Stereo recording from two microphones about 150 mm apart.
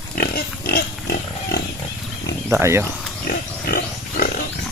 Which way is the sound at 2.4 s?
15° right (ahead or behind).